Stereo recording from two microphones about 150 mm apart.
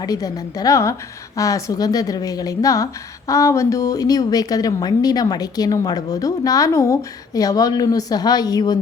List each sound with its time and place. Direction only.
0.0 s a woman's voice: 25° left (ahead or behind)